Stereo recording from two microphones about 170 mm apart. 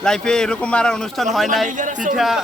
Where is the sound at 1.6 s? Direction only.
50° right (ahead or behind).